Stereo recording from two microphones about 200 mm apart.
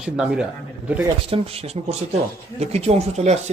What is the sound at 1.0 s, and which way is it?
Speech, 30° right (ahead or behind).